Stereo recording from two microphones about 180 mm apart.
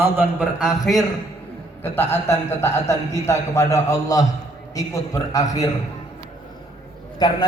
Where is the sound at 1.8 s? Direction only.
10° left (ahead or behind).